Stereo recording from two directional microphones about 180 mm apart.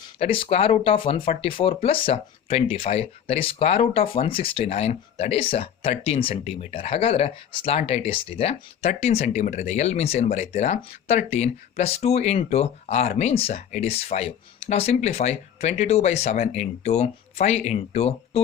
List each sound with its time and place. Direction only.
0.2 s speech: 30° left (ahead or behind)